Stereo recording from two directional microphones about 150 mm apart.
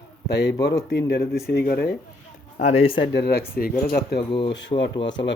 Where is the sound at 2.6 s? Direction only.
50° left (ahead or behind).